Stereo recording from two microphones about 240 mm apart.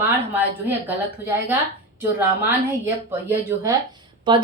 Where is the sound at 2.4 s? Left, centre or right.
Centre.